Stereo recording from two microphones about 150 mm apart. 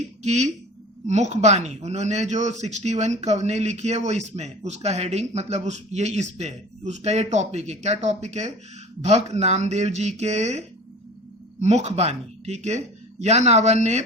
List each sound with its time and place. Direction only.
0.2 s a man's voice: 50° right (ahead or behind)
11.6 s a man's voice: 45° right (ahead or behind)